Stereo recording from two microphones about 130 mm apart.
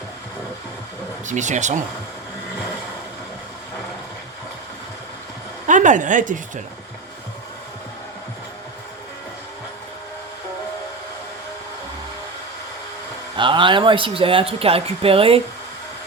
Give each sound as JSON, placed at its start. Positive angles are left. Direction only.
{"t": 1.3, "sound": "speech", "side_deg": -70}
{"t": 5.6, "sound": "speech", "side_deg": -75}
{"t": 13.3, "sound": "speech", "side_deg": -40}